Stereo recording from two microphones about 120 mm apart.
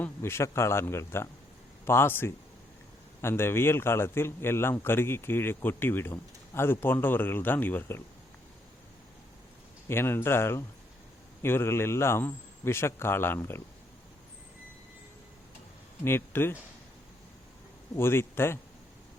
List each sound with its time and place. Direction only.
0.0 s a man's voice: 20° left (ahead or behind)
9.9 s a man's voice: 20° left (ahead or behind)
16.0 s a man's voice: 20° left (ahead or behind)
17.9 s a man's voice: 20° left (ahead or behind)